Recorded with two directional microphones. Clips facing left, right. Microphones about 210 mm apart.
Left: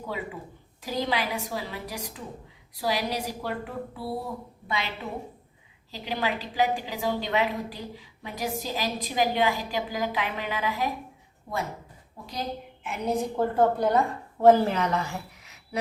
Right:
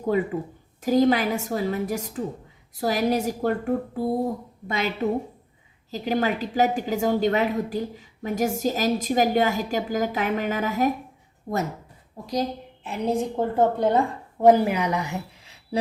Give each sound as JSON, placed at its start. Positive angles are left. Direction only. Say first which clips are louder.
{"t": 0.8, "sound": "a woman's voice", "louder": "right 10 dB", "side_deg": -45}
{"t": 13.3, "sound": "a woman's voice", "louder": "right 1 dB", "side_deg": -20}
{"t": 14.4, "sound": "a woman's voice", "louder": "right 2 dB", "side_deg": -15}
{"t": 15.4, "sound": "a sound", "louder": "right 6 dB", "side_deg": -30}